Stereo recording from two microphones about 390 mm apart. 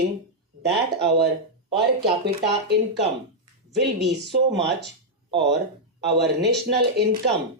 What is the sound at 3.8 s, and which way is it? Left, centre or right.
Speech, right.